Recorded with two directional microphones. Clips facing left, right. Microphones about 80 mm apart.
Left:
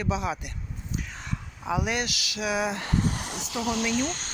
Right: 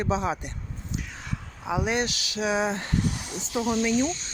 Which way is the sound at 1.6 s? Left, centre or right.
Right.